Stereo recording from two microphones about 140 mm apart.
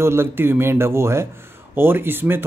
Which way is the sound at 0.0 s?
20° right (ahead or behind).